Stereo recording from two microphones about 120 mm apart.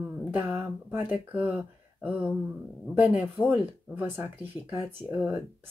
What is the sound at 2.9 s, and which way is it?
Speech, 15° right (ahead or behind).